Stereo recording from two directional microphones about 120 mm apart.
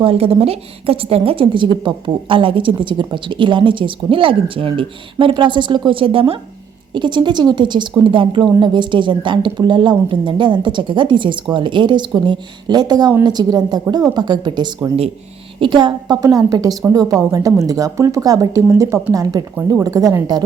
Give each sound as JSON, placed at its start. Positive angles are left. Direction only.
{"t": 0.0, "sound": "a woman's voice", "side_deg": -55}